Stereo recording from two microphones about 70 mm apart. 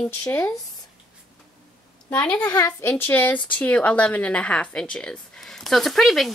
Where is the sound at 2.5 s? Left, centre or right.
Left.